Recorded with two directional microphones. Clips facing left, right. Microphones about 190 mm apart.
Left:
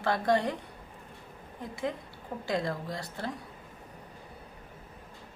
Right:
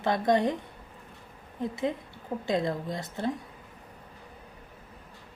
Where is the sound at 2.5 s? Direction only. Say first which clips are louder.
Right 3 dB; 20° right (ahead or behind).